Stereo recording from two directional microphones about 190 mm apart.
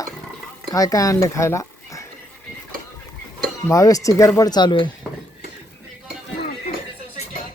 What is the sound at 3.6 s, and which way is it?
Speech, 15° left (ahead or behind).